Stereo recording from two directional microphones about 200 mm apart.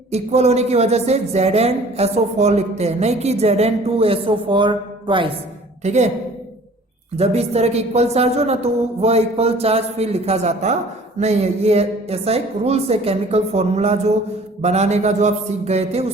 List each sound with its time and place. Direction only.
0.1 s speech: 30° right (ahead or behind)
5.8 s speech: 35° right (ahead or behind)
7.2 s speech: 30° right (ahead or behind)